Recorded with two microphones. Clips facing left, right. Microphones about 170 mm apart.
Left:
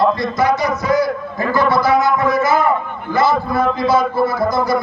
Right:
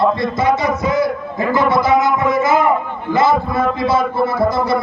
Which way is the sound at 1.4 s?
20° right (ahead or behind).